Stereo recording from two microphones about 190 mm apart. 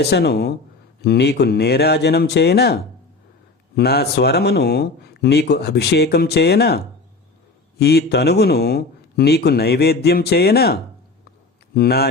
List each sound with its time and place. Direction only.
0.0 s speech: 60° left (ahead or behind)